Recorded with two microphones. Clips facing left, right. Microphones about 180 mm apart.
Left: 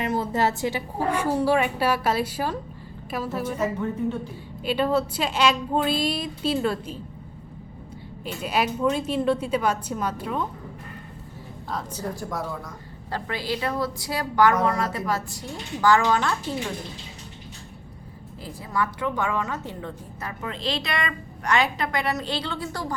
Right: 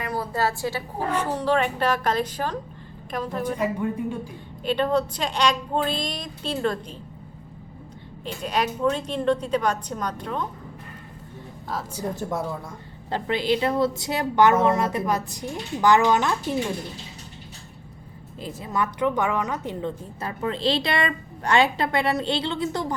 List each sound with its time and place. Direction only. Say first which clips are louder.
0.0 s a sound: left 2 dB; 20° left (ahead or behind)
1.1 s a woman's voice: left 1 dB; 10° left (ahead or behind)
3.4 s a woman's voice: right 2 dB; 15° right (ahead or behind)
4.6 s a woman's voice: even; 5° left (ahead or behind)
8.2 s a woman's voice: even; 5° left (ahead or behind)
11.7 s a woman's voice: right 1 dB; 5° right (ahead or behind)
12.0 s a woman's voice: right 4 dB; 25° right (ahead or behind)
18.4 s a woman's voice: right 1 dB; 20° right (ahead or behind)
20.2 s a woman's voice: right 6 dB; 30° right (ahead or behind)